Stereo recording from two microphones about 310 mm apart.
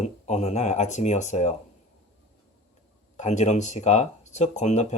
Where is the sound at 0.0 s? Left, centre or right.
Left.